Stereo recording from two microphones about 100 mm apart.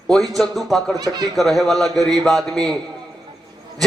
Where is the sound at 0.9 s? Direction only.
40° right (ahead or behind).